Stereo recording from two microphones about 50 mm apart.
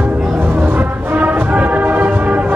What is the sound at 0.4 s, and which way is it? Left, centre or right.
Music, right.